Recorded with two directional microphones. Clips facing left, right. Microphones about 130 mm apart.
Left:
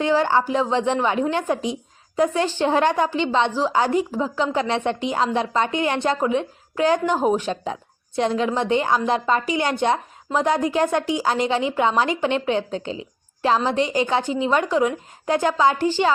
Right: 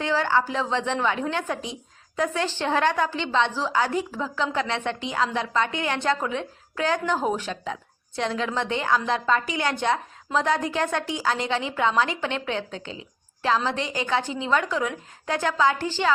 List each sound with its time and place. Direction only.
0.0 s a woman's voice: 15° left (ahead or behind)